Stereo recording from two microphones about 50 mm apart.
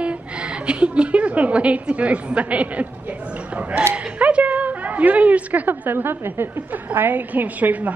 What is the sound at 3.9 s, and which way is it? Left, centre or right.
A woman's voice, right.